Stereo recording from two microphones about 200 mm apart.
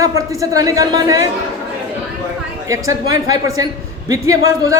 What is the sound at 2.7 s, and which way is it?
A woman's voice, 15° right (ahead or behind).